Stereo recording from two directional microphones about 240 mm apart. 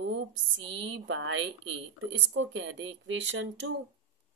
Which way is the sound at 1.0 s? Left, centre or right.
Right.